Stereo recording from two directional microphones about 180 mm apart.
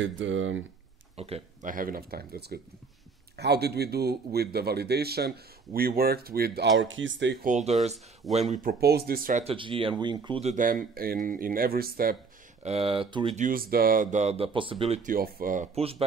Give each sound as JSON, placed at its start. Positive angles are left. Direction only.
{"t": 0.0, "sound": "speech", "side_deg": -90}
{"t": 1.1, "sound": "speech", "side_deg": -35}
{"t": 6.8, "sound": "speech", "side_deg": -90}
{"t": 7.4, "sound": "speech", "side_deg": -40}
{"t": 9.4, "sound": "speech", "side_deg": -30}
{"t": 10.4, "sound": "speech", "side_deg": -45}
{"t": 12.6, "sound": "speech", "side_deg": -30}
{"t": 13.4, "sound": "speech", "side_deg": -55}
{"t": 15.0, "sound": "speech", "side_deg": -50}